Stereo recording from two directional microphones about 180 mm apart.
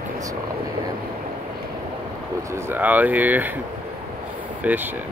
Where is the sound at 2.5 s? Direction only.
10° right (ahead or behind).